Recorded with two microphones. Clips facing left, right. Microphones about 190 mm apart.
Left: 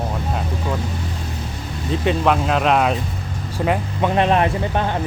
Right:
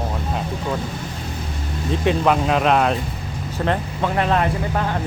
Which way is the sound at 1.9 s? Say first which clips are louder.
Even; centre (ahead or behind).